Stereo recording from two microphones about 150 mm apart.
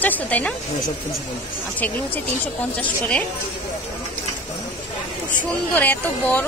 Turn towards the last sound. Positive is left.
turn(degrees=10)  # may be behind; listen again after turning